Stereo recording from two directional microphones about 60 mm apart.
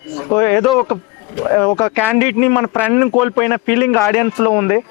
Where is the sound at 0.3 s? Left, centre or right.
Left.